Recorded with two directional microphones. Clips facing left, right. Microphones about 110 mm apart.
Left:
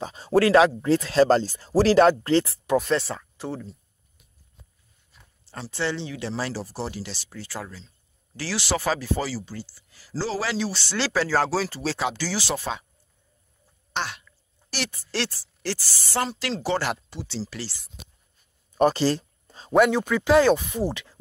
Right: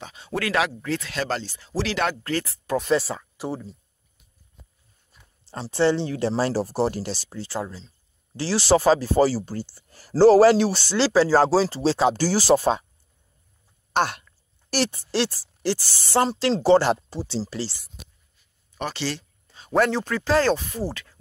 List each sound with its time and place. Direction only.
0.0 s speech: 35° left (ahead or behind)
2.8 s speech: 5° right (ahead or behind)
5.5 s speech: 30° right (ahead or behind); by 10.9 s 50° right (ahead or behind)
11.0 s speech: 35° right (ahead or behind)
13.9 s a sound: 50° right (ahead or behind)
15.0 s speech: 15° right (ahead or behind)
16.1 s speech: 30° right (ahead or behind)
18.8 s a sound: 40° left (ahead or behind)
19.7 s speech: 10° left (ahead or behind)